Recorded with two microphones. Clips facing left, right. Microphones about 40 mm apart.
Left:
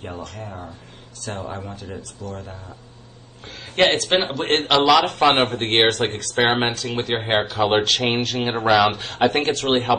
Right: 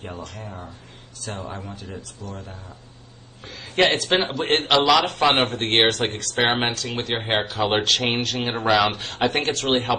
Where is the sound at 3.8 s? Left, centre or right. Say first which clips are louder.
Left 1 dB; left.